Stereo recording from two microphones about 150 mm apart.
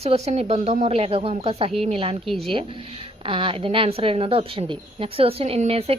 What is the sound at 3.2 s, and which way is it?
A woman's voice, 35° right (ahead or behind).